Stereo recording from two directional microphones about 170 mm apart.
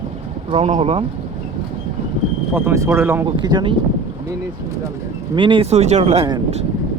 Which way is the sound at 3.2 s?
25° right (ahead or behind).